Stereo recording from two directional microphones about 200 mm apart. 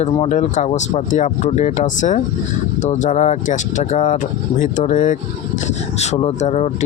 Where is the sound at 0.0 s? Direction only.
35° left (ahead or behind).